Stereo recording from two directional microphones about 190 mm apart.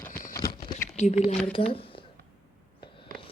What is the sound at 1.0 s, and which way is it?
Speech, 35° left (ahead or behind).